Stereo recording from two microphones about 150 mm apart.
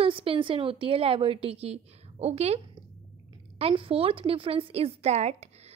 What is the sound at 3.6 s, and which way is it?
A woman's voice, 40° right (ahead or behind).